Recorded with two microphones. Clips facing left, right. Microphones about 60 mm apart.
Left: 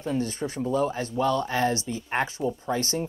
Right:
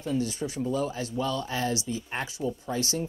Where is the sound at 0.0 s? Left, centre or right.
Left.